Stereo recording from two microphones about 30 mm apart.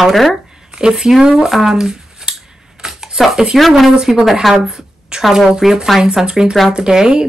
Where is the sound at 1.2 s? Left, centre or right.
Centre.